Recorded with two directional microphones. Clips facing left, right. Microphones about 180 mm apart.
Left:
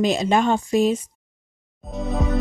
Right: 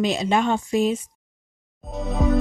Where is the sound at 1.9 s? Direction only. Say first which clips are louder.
Right 2 dB; centre (ahead or behind).